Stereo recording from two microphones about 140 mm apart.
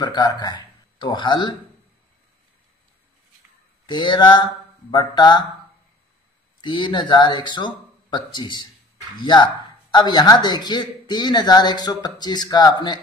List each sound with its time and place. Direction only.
0.0 s speech: 30° left (ahead or behind)
3.8 s a man's voice: 35° left (ahead or behind)
6.6 s a man's voice: 35° left (ahead or behind)